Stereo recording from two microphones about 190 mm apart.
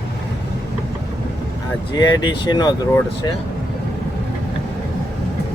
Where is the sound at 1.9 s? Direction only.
20° left (ahead or behind).